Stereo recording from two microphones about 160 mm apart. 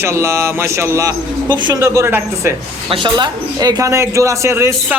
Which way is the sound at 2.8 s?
30° right (ahead or behind).